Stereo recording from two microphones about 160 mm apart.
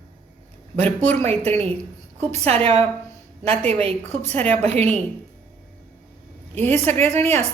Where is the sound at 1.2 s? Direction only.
40° right (ahead or behind).